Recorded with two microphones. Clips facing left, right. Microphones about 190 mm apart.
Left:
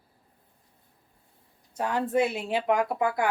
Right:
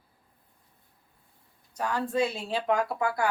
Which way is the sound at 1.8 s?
20° left (ahead or behind).